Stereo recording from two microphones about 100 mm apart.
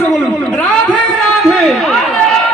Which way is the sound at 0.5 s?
10° left (ahead or behind).